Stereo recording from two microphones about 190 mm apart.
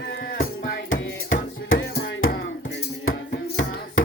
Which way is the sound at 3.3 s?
65° left (ahead or behind).